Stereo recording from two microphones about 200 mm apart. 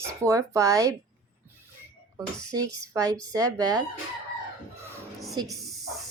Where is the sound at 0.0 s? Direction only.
15° right (ahead or behind).